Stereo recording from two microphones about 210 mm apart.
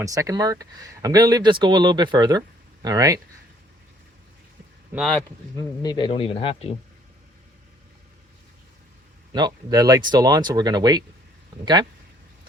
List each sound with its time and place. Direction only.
0.0 s speech: 15° right (ahead or behind)
4.9 s a man's voice: centre (ahead or behind)
5.5 s speech: 20° left (ahead or behind)
9.3 s speech: 20° right (ahead or behind)